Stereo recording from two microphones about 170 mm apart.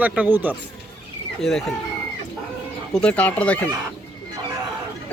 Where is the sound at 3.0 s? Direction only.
5° left (ahead or behind).